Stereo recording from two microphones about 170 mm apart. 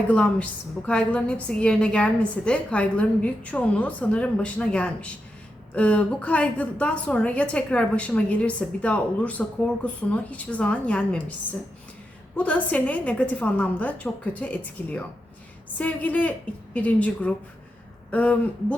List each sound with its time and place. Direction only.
0.1 s a woman's voice: 5° left (ahead or behind)
12.4 s a woman's voice: 10° left (ahead or behind)